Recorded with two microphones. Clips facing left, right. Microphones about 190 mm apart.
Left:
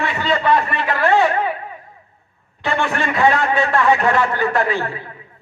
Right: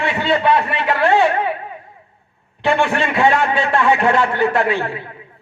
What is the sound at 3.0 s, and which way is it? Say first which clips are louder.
A man's voice: right 1 dB; 25° right (ahead or behind).